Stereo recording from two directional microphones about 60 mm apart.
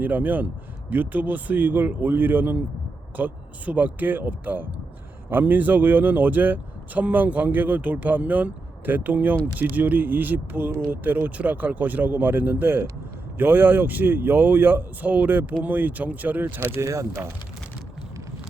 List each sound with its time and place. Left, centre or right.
0.0 s speech: right
16.7 s speech: right